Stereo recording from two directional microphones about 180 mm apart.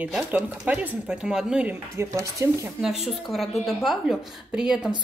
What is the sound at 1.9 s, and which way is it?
Speech, 15° right (ahead or behind).